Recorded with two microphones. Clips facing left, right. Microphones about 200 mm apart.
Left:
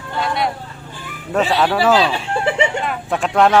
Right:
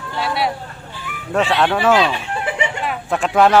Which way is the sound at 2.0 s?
30° left (ahead or behind).